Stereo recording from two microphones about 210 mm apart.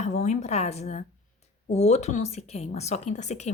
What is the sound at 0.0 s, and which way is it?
A woman's voice, 35° left (ahead or behind).